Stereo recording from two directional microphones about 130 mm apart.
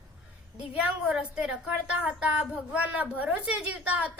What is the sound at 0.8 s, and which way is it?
A woman's voice, 5° right (ahead or behind).